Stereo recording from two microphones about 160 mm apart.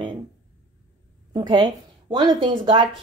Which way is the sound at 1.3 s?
25° right (ahead or behind).